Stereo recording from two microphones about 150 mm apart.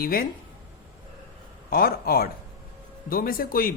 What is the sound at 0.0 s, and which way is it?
Speech, 75° left (ahead or behind).